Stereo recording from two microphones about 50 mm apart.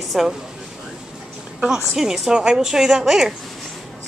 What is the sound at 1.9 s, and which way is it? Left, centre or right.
Speech, centre.